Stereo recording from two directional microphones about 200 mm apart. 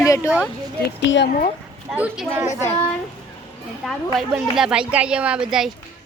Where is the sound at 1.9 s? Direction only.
5° right (ahead or behind).